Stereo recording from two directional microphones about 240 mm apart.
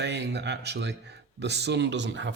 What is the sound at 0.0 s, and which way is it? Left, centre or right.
Speech, right.